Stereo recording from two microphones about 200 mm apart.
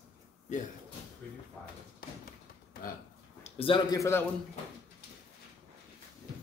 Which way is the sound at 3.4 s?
25° left (ahead or behind).